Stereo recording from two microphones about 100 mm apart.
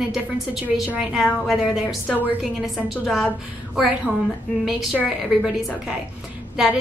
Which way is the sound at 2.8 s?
Centre (ahead or behind).